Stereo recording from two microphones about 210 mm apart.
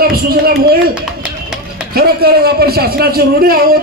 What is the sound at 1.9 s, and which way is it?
A man's voice, 50° right (ahead or behind).